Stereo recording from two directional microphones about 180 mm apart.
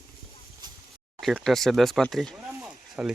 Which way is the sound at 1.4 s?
Centre (ahead or behind).